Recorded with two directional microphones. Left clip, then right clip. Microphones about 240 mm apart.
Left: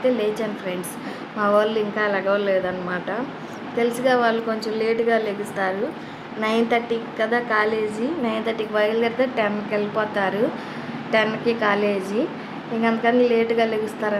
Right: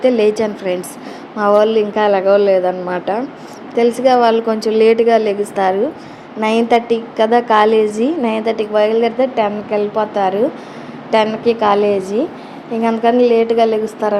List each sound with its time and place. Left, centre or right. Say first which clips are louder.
0.0 s a woman's voice: right 9 dB; right